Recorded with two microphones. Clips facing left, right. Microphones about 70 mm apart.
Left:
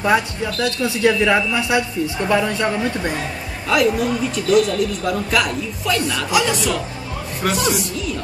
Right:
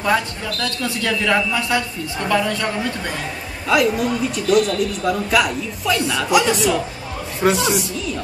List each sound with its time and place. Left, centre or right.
0.0 s speech: centre
3.6 s a man's voice: centre
7.4 s a woman's voice: centre